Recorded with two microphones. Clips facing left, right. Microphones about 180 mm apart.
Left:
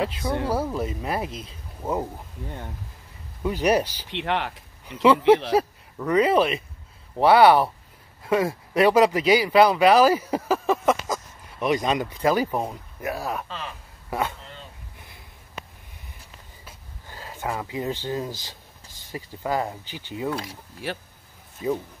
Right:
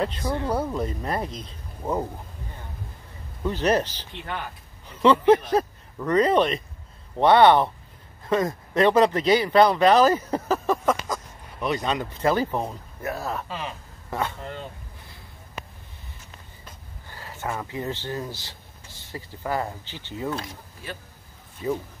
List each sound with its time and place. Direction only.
0.0 s speech: 5° left (ahead or behind)
3.4 s speech: 10° left (ahead or behind)
4.1 s speech: 80° left
5.0 s speech: 10° left (ahead or behind)
13.5 s speech: 15° right (ahead or behind)
14.4 s speech: 55° right (ahead or behind)
16.6 s speech: 15° left (ahead or behind)
20.8 s speech: 75° left (ahead or behind)
21.6 s speech: 15° left (ahead or behind)